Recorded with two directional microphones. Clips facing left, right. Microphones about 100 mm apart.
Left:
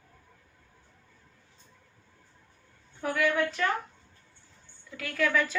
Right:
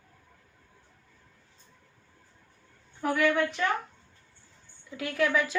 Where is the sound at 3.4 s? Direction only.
15° right (ahead or behind).